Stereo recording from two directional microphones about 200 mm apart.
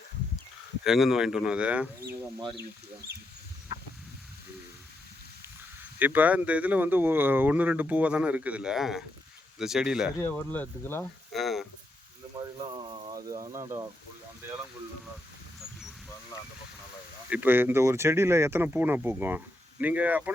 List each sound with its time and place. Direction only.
0.9 s speech: centre (ahead or behind)
6.0 s speech: 10° right (ahead or behind)
10.2 s speech: 10° left (ahead or behind)
13.1 s speech: 20° right (ahead or behind)
17.2 s speech: 10° right (ahead or behind)